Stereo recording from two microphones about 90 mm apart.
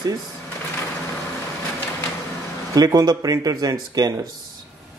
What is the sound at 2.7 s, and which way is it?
Speech, 45° right (ahead or behind).